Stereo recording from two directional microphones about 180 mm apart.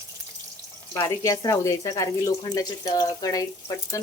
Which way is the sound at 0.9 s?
20° left (ahead or behind).